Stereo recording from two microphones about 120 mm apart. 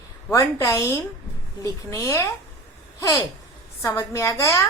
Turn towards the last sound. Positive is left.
turn(degrees=25)  # may be behind; listen again after turning